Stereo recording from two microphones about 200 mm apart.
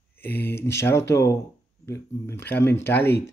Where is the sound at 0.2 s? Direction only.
10° left (ahead or behind).